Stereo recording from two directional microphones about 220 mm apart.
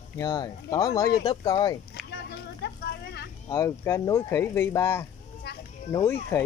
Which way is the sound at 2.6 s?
50° left (ahead or behind).